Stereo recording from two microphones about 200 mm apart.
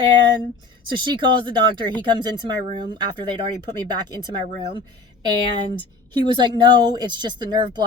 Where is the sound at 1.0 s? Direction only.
25° right (ahead or behind).